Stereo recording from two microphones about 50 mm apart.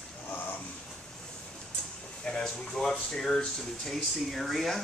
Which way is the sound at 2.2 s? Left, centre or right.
Centre.